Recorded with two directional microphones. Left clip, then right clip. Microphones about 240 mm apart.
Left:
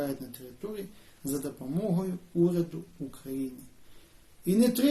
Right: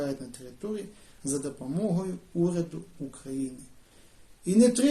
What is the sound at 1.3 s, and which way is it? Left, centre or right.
A man's voice, centre.